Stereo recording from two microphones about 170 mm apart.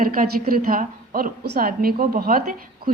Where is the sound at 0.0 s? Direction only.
55° right (ahead or behind).